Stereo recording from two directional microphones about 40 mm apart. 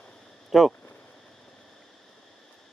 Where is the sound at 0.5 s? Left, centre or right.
Centre.